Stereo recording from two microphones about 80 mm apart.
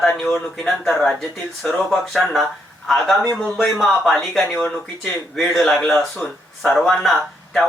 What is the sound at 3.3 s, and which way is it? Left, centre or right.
Speech, centre.